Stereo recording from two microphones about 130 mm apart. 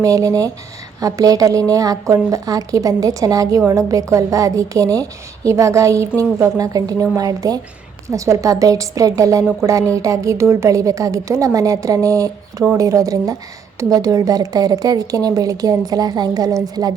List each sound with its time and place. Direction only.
0.0 s a woman's voice: 25° right (ahead or behind)